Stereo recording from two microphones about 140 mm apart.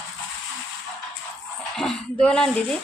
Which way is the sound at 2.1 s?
10° left (ahead or behind).